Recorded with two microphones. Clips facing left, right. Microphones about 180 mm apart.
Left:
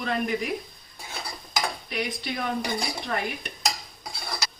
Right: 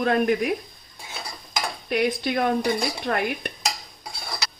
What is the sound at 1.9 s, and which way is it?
Dishes, 55° right (ahead or behind).